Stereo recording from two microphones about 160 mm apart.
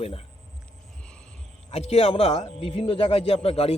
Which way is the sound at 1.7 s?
40° left (ahead or behind).